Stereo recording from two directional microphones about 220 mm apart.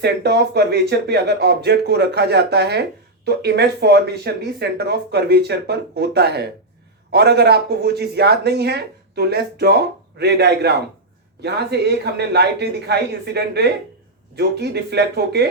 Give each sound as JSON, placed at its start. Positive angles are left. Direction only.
{"t": 0.0, "sound": "speech", "side_deg": -50}